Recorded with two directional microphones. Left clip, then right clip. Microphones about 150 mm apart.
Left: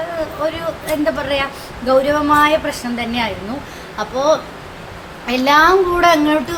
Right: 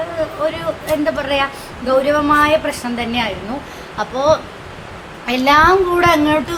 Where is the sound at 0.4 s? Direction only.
15° right (ahead or behind).